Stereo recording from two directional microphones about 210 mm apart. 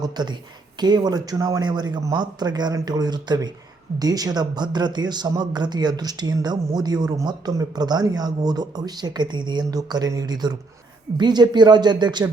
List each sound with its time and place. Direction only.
0.0 s speech: 20° right (ahead or behind)